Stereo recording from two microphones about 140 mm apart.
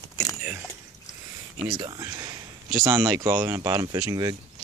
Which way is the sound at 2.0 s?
25° right (ahead or behind).